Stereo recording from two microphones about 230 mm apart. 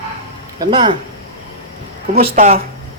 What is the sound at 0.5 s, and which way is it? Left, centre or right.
Speech, centre.